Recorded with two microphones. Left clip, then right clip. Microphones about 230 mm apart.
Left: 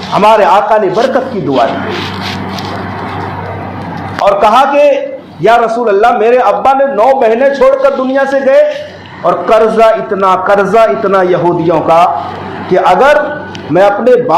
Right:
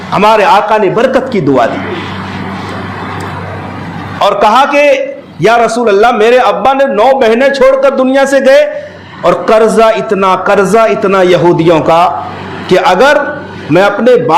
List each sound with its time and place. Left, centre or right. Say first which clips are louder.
0.1 s a man's voice: even; right
4.2 s a man's voice: even; right